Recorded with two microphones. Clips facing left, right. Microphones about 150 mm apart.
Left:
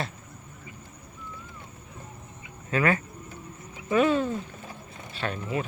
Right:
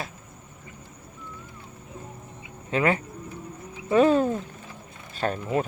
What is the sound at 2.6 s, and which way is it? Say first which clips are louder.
Speech: right 1 dB; 20° right (ahead or behind).